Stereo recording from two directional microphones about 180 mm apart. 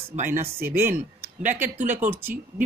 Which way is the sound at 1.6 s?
45° right (ahead or behind).